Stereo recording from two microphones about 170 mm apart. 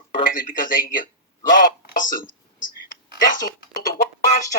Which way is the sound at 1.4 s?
55° left (ahead or behind).